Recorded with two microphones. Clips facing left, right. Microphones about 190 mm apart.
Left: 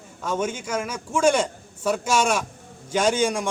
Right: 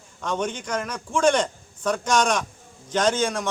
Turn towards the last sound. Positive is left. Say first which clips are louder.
# left 1 dB
turn(degrees=10)  # may be behind; listen again after turning